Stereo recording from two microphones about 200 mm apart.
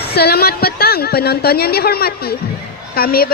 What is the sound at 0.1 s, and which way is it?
A woman's voice, 55° left (ahead or behind).